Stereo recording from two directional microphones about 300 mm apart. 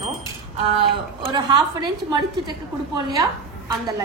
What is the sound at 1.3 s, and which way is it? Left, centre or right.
A woman's voice, centre.